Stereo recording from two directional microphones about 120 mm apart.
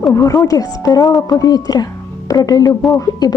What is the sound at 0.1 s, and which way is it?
A woman's voice, 25° left (ahead or behind).